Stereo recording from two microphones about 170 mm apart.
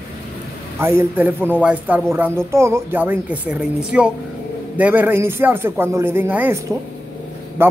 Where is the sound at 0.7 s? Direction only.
15° right (ahead or behind).